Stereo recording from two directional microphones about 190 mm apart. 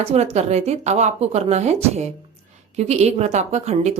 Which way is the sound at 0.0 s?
35° right (ahead or behind).